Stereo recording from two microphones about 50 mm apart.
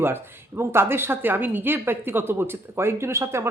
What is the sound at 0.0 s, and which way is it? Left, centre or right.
Speech, right.